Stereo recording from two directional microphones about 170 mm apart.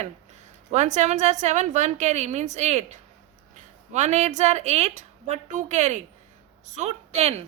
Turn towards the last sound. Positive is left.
turn(degrees=-40)  # may be behind; listen again after turning